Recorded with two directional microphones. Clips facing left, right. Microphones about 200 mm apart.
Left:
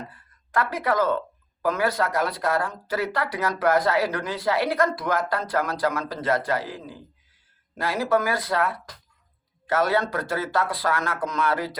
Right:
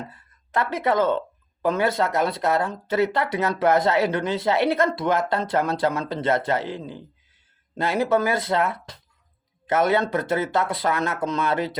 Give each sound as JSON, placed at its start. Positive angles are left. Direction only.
{"t": 0.1, "sound": "speech", "side_deg": -25}